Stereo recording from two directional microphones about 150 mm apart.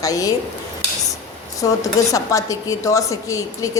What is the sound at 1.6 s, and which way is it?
A woman's voice, 20° left (ahead or behind).